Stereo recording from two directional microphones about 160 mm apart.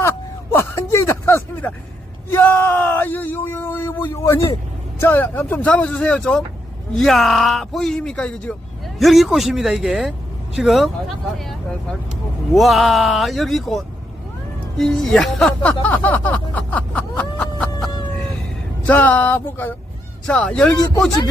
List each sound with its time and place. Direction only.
0.5 s a sound: 15° left (ahead or behind)
2.3 s speech: 15° left (ahead or behind)
18.9 s speech: 10° left (ahead or behind)